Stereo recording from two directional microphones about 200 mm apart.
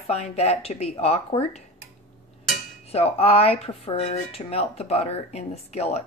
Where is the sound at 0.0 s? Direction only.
30° left (ahead or behind).